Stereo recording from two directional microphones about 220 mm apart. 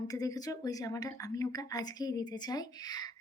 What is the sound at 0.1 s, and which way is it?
A woman's voice, 15° left (ahead or behind).